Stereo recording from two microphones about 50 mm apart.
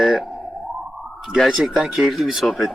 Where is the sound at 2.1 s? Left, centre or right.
Centre.